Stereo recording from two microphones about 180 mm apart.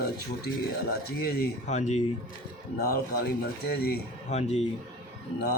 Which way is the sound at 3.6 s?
60° left (ahead or behind).